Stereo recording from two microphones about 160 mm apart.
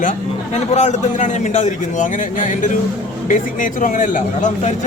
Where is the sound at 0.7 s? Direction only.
45° left (ahead or behind).